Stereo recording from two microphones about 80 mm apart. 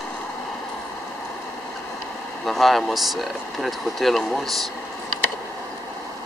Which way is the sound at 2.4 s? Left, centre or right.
Centre.